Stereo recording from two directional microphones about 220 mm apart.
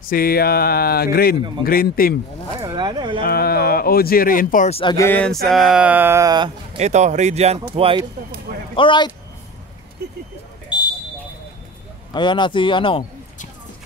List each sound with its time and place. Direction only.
0.1 s speech: 40° left (ahead or behind)
2.6 s a sound: 20° right (ahead or behind)
3.2 s speech: 45° left (ahead or behind); by 4.9 s 25° left (ahead or behind)
4.9 s speech: 10° left (ahead or behind); by 8.0 s 25° right (ahead or behind)
8.7 s speech: 20° left (ahead or behind)
10.7 s a sound: 5° right (ahead or behind)
12.1 s speech: 20° left (ahead or behind)